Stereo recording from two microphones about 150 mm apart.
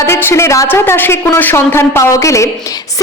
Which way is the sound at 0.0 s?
15° left (ahead or behind).